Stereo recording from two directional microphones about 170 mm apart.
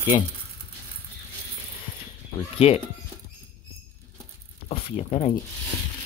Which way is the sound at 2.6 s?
35° left (ahead or behind).